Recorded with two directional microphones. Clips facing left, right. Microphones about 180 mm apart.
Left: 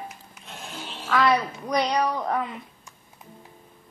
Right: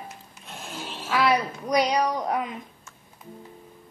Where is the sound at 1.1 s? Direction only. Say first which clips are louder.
Left 1 dB; 10° right (ahead or behind).